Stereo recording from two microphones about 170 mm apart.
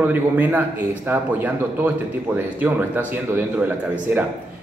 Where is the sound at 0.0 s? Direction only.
10° right (ahead or behind).